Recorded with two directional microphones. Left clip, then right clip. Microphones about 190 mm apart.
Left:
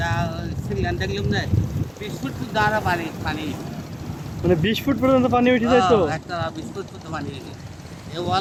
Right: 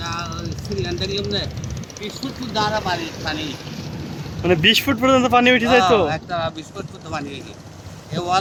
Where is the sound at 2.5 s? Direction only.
20° right (ahead or behind).